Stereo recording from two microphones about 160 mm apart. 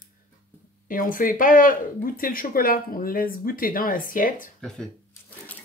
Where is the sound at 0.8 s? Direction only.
60° left (ahead or behind).